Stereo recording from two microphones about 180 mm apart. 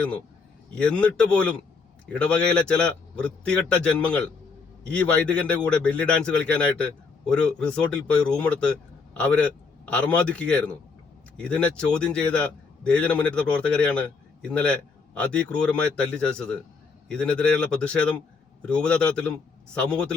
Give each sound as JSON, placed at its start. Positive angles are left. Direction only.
{"t": 0.8, "sound": "a man's voice", "side_deg": 5}